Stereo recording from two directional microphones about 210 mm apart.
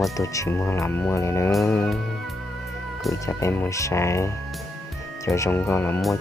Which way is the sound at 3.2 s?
10° left (ahead or behind).